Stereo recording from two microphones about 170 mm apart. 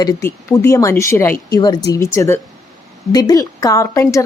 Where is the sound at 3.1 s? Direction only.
20° left (ahead or behind).